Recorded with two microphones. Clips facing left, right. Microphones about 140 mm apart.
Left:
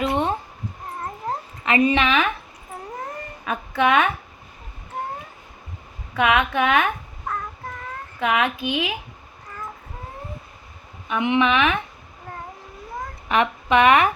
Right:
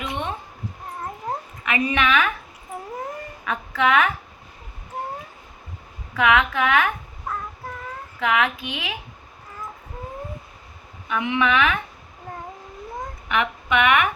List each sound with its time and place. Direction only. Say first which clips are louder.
0.0 s a sound: left 7 dB; 35° left (ahead or behind)
1.6 s a woman's voice: left 4 dB; 30° left (ahead or behind)
2.9 s baby cry: right 1 dB; 10° right (ahead or behind)
3.8 s a woman's voice: left 1 dB; 25° left (ahead or behind)
6.1 s a woman's voice: even; 25° left (ahead or behind)
8.2 s a woman's voice: left 1 dB; 25° left (ahead or behind)
11.1 s a woman's voice: left 2 dB; 25° left (ahead or behind)
13.2 s speech: left 4 dB; 35° left (ahead or behind)